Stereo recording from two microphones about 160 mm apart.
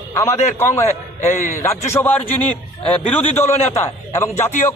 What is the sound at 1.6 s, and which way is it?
A man's voice, 15° left (ahead or behind).